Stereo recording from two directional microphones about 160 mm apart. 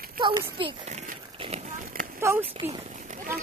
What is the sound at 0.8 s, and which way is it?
Run, 45° right (ahead or behind).